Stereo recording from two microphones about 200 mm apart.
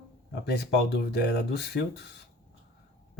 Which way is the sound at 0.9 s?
55° left (ahead or behind).